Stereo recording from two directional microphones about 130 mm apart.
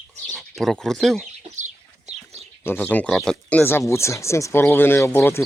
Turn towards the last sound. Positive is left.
turn(degrees=20)  # may be behind; listen again after turning